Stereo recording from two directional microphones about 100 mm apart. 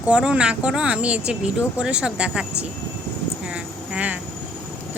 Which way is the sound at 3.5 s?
10° right (ahead or behind).